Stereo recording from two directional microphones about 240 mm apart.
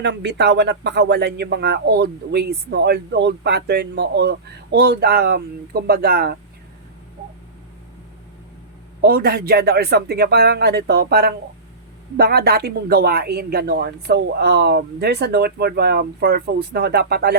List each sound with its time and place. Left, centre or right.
0.0 s speech: right
9.0 s speech: right